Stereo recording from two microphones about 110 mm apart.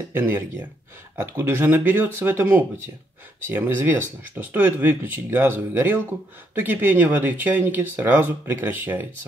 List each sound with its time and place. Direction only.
0.1 s speech: 15° right (ahead or behind)